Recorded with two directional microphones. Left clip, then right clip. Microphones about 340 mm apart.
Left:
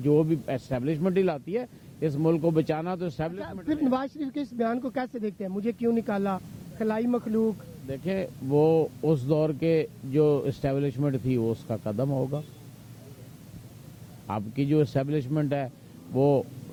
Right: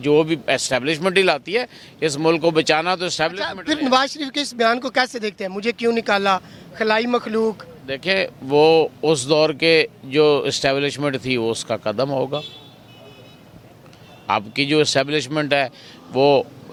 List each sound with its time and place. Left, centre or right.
0.0 s a man's voice: centre
12.1 s a man's voice: right
14.3 s a man's voice: centre